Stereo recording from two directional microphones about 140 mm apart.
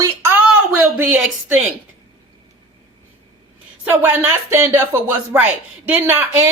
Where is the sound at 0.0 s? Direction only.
15° right (ahead or behind).